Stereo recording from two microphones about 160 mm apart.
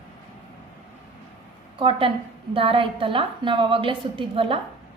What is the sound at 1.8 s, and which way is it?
A woman's voice, 35° right (ahead or behind).